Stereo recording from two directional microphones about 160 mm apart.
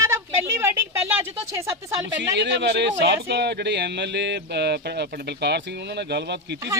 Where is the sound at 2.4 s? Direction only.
90° right.